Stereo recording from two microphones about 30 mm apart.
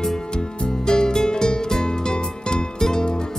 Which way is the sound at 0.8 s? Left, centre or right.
Left.